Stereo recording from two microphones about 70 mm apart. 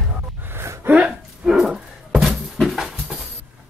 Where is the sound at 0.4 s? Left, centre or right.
Right.